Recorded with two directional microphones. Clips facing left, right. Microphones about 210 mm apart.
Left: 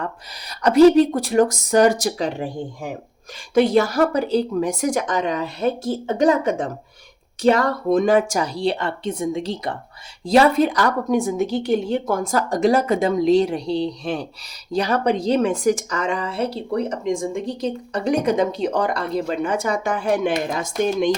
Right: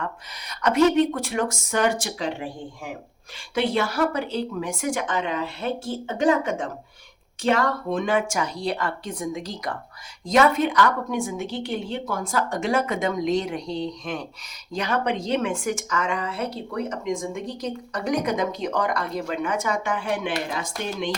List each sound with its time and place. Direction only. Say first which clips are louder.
0.0 s a woman's voice: left 3 dB; 35° left (ahead or behind)